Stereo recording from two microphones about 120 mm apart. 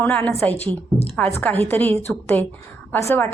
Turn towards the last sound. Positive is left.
turn(degrees=20)  # may be behind; listen again after turning